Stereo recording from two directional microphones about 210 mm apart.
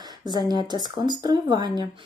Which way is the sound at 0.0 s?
20° right (ahead or behind).